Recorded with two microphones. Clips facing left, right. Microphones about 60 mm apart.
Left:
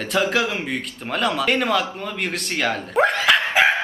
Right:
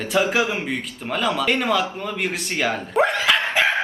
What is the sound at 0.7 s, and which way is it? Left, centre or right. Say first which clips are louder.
Speech: even; centre.